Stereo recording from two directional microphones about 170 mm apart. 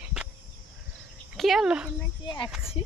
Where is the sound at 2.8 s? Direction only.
35° left (ahead or behind).